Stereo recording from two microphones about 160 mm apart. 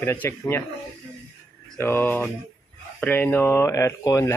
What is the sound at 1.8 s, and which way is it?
A man's voice, 15° left (ahead or behind).